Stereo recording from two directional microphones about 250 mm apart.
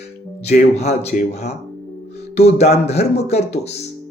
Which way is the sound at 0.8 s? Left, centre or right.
Left.